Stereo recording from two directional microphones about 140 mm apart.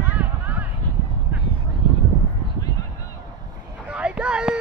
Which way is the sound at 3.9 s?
10° right (ahead or behind).